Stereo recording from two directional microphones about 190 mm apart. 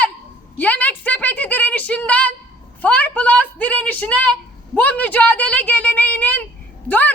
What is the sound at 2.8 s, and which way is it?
A woman's voice, 10° left (ahead or behind).